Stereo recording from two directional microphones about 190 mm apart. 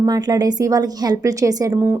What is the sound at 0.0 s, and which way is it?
A woman's voice, 20° right (ahead or behind).